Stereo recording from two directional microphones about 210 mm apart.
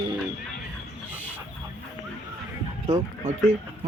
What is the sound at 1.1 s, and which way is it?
Chicken, 10° right (ahead or behind).